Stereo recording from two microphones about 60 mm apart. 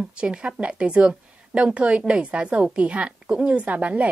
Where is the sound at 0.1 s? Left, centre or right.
Centre.